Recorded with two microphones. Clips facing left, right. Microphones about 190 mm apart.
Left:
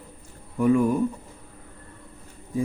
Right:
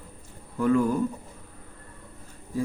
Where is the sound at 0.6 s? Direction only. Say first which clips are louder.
Left 2 dB; 15° left (ahead or behind).